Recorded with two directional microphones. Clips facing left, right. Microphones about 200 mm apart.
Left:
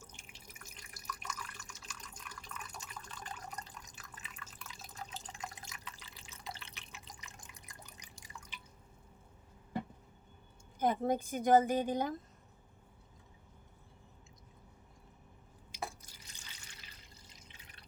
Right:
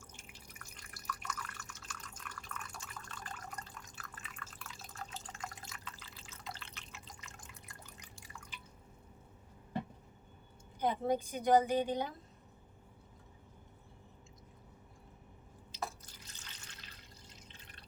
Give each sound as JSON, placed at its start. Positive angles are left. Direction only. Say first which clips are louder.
{"t": 0.6, "sound": "drip", "louder": "even", "side_deg": 20}
{"t": 10.8, "sound": "a woman's voice", "louder": "left 1 dB", "side_deg": 45}
{"t": 15.7, "sound": "drip", "louder": "right 1 dB", "side_deg": 10}